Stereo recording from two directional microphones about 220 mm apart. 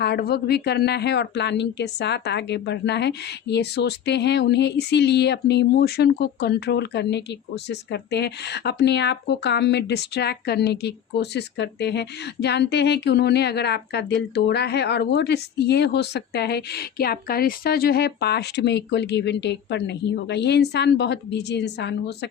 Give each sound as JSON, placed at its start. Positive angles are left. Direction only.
{"t": 0.0, "sound": "a woman's voice", "side_deg": 45}